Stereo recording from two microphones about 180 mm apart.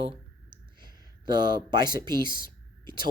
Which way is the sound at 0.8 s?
25° right (ahead or behind).